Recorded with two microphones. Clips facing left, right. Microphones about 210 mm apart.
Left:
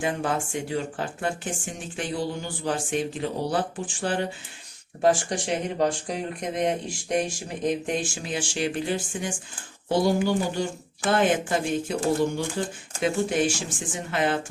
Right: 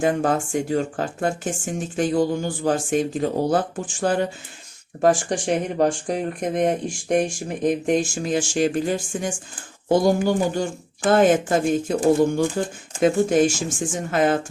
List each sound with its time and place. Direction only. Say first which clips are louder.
0.0 s speech: right 6 dB; 45° right (ahead or behind)